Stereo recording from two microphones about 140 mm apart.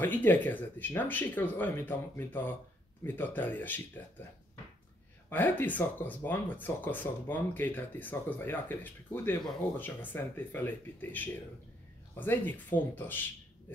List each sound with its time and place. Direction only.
0.0 s speech: 15° left (ahead or behind)
5.3 s speech: 15° left (ahead or behind)
13.7 s a sound: 15° left (ahead or behind)